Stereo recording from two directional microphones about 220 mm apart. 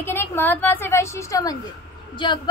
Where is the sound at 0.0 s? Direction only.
10° left (ahead or behind).